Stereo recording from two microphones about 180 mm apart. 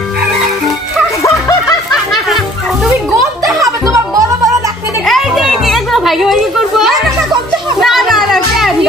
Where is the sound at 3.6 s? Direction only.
20° right (ahead or behind).